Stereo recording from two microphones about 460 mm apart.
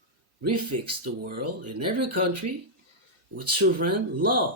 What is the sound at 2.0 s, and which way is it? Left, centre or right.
Speech, right.